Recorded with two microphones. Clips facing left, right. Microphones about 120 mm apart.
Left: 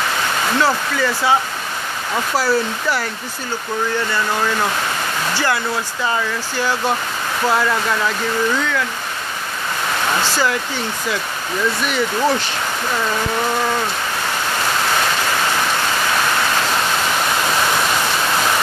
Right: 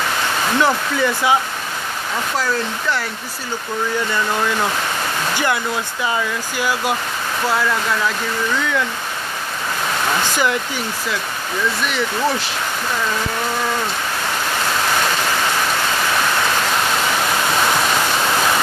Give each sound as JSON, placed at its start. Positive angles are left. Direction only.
{"t": 0.6, "sound": "speech", "side_deg": -15}
{"t": 2.3, "sound": "speech", "side_deg": 5}
{"t": 5.3, "sound": "speech", "side_deg": -15}
{"t": 10.3, "sound": "speech", "side_deg": -20}
{"t": 11.9, "sound": "speech", "side_deg": 0}